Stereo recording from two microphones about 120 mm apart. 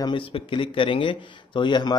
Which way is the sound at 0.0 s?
45° left (ahead or behind).